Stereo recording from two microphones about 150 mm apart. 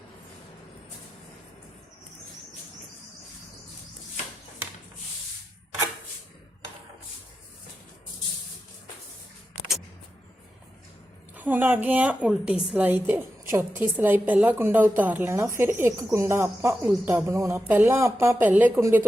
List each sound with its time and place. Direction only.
11.3 s a woman's voice: 10° right (ahead or behind)